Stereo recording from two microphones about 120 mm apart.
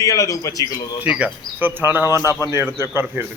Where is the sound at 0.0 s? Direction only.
30° left (ahead or behind).